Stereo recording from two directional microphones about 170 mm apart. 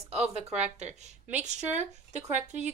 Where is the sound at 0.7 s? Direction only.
40° right (ahead or behind).